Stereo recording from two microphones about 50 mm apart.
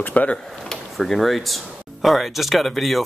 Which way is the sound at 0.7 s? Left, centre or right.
Centre.